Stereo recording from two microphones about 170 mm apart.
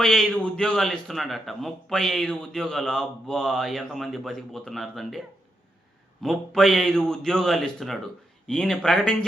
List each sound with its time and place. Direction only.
0.0 s a man's voice: 5° left (ahead or behind)
6.2 s a man's voice: centre (ahead or behind)